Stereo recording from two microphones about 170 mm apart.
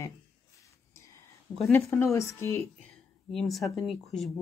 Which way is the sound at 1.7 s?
15° left (ahead or behind).